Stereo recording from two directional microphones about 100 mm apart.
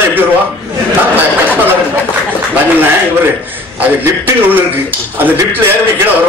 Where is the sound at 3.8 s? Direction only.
20° right (ahead or behind).